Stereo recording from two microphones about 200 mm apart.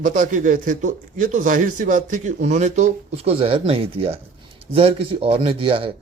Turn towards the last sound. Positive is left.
turn(degrees=-25)  # may be behind; listen again after turning